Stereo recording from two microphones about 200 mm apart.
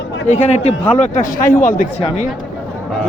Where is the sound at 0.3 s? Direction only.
30° left (ahead or behind).